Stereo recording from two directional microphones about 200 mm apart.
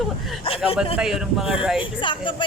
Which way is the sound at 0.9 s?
5° right (ahead or behind).